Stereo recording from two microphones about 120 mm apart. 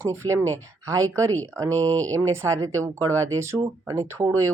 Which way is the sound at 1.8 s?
15° left (ahead or behind).